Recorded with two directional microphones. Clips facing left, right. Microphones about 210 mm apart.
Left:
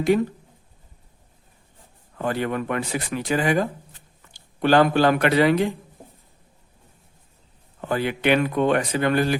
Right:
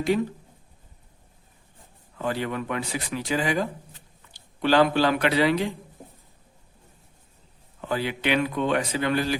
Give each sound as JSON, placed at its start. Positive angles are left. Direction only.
{"t": 2.1, "sound": "a man's voice", "side_deg": 55}
{"t": 7.8, "sound": "speech", "side_deg": 50}